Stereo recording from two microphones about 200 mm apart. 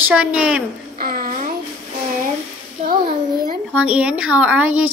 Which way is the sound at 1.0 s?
50° right (ahead or behind).